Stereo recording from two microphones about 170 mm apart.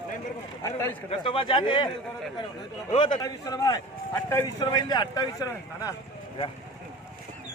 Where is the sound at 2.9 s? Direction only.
25° left (ahead or behind).